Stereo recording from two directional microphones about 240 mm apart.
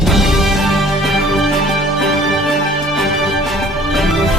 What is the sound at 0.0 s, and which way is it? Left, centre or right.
Music, centre.